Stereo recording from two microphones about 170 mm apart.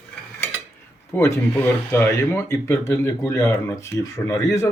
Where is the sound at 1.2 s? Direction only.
15° left (ahead or behind).